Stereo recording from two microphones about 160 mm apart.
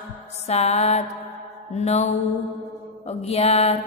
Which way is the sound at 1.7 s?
45° left (ahead or behind).